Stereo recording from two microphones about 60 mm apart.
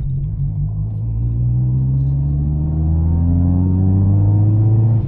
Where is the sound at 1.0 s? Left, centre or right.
Centre.